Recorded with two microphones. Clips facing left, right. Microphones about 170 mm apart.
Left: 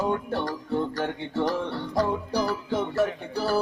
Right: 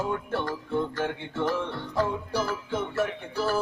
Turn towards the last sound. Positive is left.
turn(degrees=40)  # may be behind; listen again after turning